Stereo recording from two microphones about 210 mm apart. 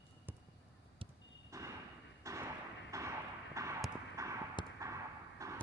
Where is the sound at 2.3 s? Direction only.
15° right (ahead or behind).